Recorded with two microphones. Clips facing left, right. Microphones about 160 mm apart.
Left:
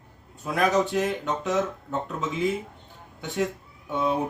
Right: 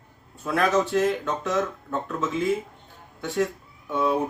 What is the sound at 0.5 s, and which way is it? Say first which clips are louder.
Speech: right 1 dB; 15° left (ahead or behind).